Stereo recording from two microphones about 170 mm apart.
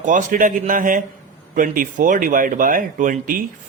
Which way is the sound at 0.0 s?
50° right (ahead or behind).